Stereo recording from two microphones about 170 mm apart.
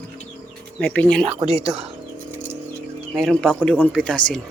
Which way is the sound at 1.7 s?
15° right (ahead or behind).